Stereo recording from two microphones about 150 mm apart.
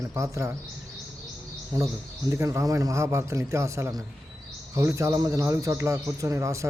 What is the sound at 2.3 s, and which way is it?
A man's voice, 20° right (ahead or behind).